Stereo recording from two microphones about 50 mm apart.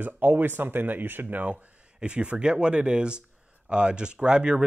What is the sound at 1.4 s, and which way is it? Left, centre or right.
Speech, right.